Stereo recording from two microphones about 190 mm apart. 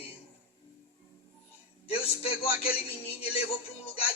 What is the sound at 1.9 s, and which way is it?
Speech, 30° left (ahead or behind).